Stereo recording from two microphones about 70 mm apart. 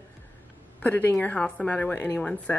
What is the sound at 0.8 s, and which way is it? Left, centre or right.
A woman's voice, left.